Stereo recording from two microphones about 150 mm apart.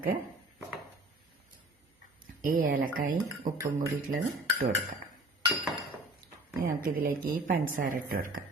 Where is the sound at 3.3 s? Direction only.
20° right (ahead or behind).